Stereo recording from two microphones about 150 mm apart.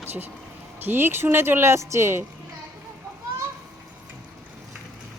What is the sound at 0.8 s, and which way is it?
Speech, 15° right (ahead or behind).